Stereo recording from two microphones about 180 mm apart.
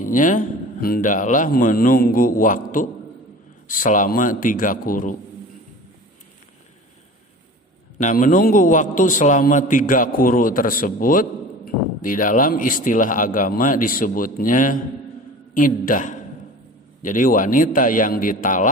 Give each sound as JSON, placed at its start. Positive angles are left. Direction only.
{"t": 0.0, "sound": "a man's voice", "side_deg": 45}
{"t": 3.7, "sound": "a man's voice", "side_deg": 45}
{"t": 8.0, "sound": "a man's voice", "side_deg": 45}